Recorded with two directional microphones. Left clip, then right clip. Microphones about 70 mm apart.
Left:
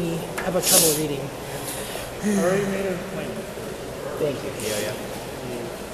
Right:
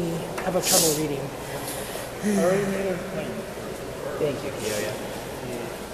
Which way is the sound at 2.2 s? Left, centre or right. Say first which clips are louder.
Even; centre.